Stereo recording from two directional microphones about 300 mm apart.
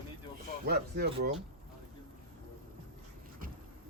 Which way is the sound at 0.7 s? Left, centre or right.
Right.